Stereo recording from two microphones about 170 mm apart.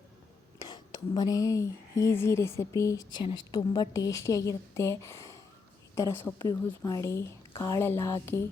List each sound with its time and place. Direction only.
0.7 s speech: 25° left (ahead or behind)